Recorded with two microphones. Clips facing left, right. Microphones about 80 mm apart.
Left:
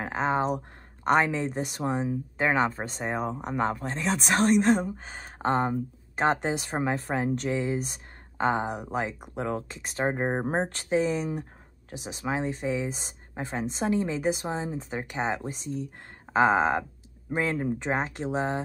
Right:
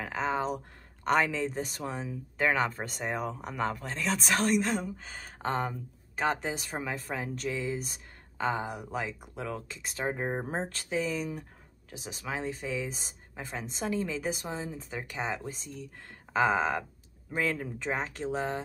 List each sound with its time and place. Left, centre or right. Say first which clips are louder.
0.0 s speech: left 4 dB; left